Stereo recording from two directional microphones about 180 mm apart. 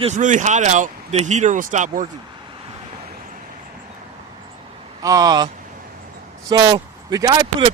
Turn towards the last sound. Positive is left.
turn(degrees=-25)  # may be behind; listen again after turning